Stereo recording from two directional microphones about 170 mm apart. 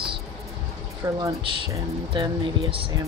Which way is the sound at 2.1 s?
30° right (ahead or behind).